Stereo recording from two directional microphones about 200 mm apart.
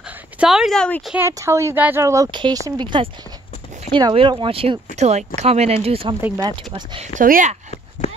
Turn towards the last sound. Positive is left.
turn(degrees=35)  # may be behind; listen again after turning